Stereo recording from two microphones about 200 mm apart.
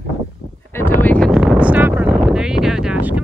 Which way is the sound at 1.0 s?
5° left (ahead or behind).